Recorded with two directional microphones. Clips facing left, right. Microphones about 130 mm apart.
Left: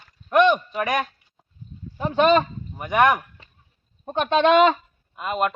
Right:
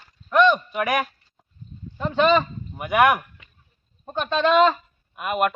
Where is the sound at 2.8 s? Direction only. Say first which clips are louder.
Even; 5° right (ahead or behind).